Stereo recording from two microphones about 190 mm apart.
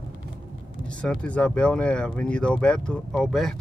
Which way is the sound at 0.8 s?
5° left (ahead or behind).